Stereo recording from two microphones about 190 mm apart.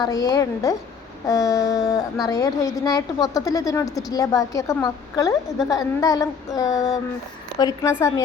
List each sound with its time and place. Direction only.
0.0 s a woman's voice: 20° left (ahead or behind)